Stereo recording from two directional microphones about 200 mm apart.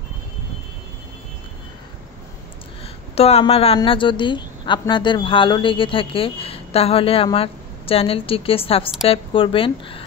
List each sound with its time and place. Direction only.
3.2 s a woman's voice: 30° left (ahead or behind)